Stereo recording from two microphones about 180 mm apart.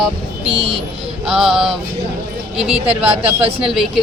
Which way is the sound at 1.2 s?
5° right (ahead or behind).